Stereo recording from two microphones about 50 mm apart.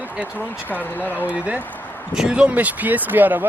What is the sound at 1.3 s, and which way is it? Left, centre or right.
Speech, right.